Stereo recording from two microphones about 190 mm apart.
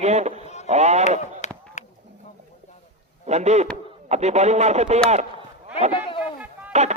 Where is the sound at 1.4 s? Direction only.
40° left (ahead or behind).